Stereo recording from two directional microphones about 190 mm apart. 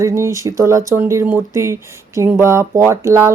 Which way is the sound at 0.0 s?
15° right (ahead or behind).